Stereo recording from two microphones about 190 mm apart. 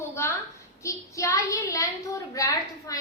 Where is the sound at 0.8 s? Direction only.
15° left (ahead or behind).